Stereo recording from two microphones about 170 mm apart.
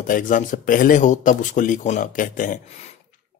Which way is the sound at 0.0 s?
50° left (ahead or behind).